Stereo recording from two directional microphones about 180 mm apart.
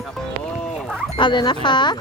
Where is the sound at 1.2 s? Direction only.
25° left (ahead or behind).